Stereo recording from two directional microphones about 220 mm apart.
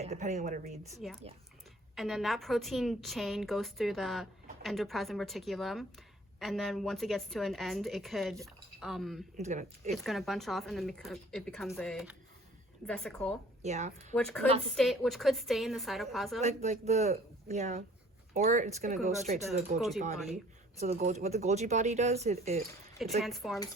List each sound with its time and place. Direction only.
0.0 s speech: 30° right (ahead or behind)
1.0 s a woman's voice: centre (ahead or behind)
9.4 s speech: 30° right (ahead or behind)
9.9 s a woman's voice: centre (ahead or behind)
13.6 s speech: 30° right (ahead or behind)
14.1 s a woman's voice: 15° left (ahead or behind)
14.8 s a woman's voice: centre (ahead or behind)
16.4 s speech: 30° right (ahead or behind)
23.2 s a woman's voice: centre (ahead or behind)